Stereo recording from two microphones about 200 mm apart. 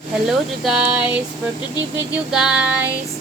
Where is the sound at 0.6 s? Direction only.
5° right (ahead or behind).